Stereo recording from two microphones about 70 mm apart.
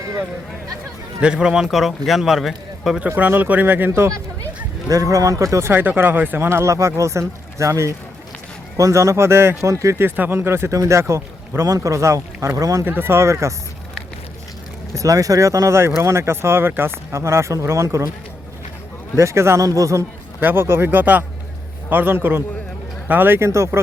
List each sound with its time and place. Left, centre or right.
1.2 s a man's voice: centre
3.2 s speech: right
4.9 s speech: right
5.8 s speech: right
12.8 s speech: right
14.9 s speech: right
17.1 s speech: right
19.1 s speech: right
20.4 s speech: right
23.5 s speech: right